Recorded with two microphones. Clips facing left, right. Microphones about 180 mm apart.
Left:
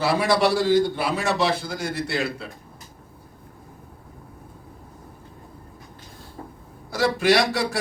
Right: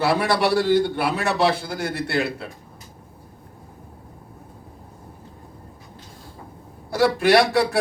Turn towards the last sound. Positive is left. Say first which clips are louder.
# right 3 dB
turn(degrees=-60)  # may be behind; listen again after turning